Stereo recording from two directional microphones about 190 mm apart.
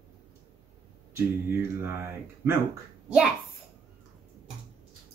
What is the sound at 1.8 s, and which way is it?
Speech, 10° right (ahead or behind).